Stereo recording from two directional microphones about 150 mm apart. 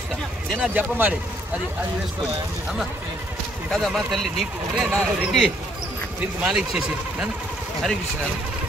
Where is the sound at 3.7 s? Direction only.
Centre (ahead or behind).